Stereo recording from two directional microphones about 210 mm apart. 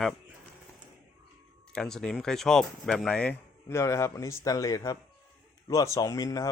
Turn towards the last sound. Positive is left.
turn(degrees=15)  # may be behind; listen again after turning